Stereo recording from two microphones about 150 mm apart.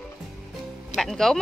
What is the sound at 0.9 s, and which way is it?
Music, centre (ahead or behind).